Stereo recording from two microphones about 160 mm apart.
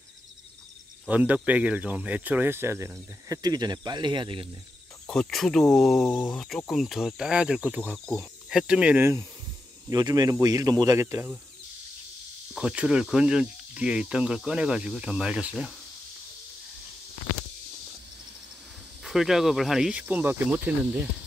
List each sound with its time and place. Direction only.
1.0 s speech: 10° right (ahead or behind); by 4.5 s 30° right (ahead or behind)
5.0 s speech: 5° left (ahead or behind); by 9.2 s 10° right (ahead or behind)
9.8 s speech: 25° right (ahead or behind)
12.5 s speech: 5° right (ahead or behind)
19.0 s speech: centre (ahead or behind)